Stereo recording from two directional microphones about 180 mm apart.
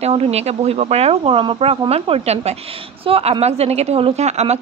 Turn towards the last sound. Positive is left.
turn(degrees=-40)  # may be behind; listen again after turning